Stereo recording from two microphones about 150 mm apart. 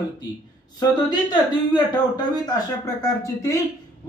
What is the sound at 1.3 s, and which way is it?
Speech, 30° left (ahead or behind).